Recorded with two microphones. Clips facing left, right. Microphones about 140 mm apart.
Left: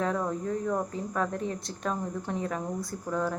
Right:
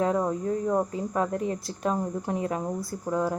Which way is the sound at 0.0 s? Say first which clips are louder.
Right 4 dB; 20° right (ahead or behind).